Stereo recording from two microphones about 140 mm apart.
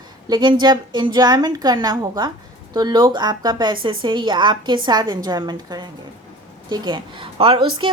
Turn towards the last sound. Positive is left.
turn(degrees=-35)  # may be behind; listen again after turning